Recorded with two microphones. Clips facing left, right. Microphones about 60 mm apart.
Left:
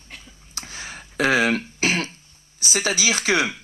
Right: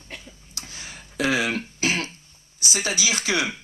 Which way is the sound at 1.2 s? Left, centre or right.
Left.